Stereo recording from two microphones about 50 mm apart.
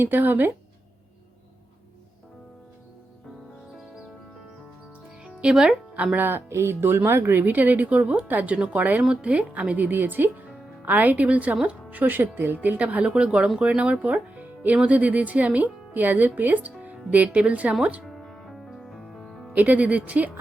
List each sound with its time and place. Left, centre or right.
0.0 s speech: right
5.2 s music: centre
6.1 s speech: right
6.5 s speech: right
13.0 s speech: right
18.0 s music: centre
19.5 s speech: right